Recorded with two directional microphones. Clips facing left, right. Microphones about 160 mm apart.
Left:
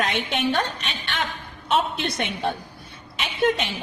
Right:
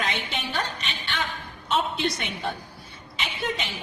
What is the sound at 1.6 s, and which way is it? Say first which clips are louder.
Speech: left 2 dB; 60° left (ahead or behind).